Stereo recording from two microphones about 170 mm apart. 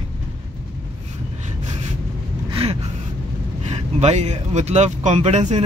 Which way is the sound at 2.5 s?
35° right (ahead or behind).